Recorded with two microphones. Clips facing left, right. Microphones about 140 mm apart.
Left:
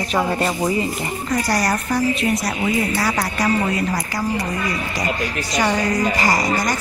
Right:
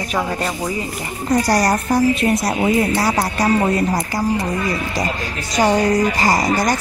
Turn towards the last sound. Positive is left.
turn(degrees=-30)  # may be behind; listen again after turning